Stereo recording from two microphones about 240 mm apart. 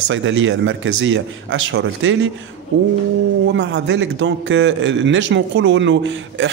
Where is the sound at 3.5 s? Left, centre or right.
Right.